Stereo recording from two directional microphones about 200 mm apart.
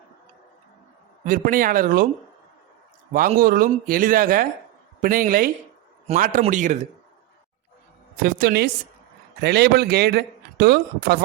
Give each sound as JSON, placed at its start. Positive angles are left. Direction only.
{"t": 1.2, "sound": "speech", "side_deg": -45}
{"t": 3.1, "sound": "a man's voice", "side_deg": -45}
{"t": 8.1, "sound": "speech", "side_deg": -45}